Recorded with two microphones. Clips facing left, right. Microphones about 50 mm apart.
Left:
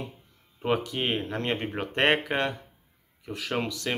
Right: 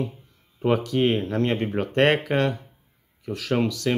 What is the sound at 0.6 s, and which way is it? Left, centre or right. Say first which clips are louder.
Speech: right 6 dB; centre.